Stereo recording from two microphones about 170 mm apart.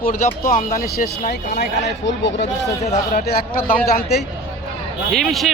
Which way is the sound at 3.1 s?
65° left (ahead or behind).